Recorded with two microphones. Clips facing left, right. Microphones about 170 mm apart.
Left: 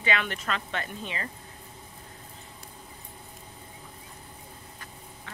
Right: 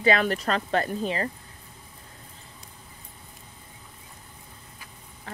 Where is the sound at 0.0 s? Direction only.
40° right (ahead or behind).